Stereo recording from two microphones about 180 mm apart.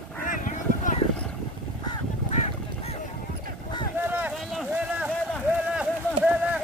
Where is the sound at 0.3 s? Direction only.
45° left (ahead or behind).